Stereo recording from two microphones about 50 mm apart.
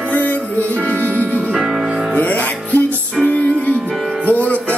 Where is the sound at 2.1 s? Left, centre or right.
Left.